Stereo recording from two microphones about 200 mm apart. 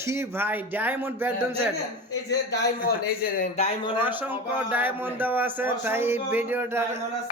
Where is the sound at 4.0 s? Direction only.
10° right (ahead or behind).